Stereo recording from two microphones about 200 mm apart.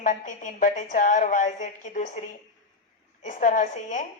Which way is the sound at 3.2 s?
40° left (ahead or behind).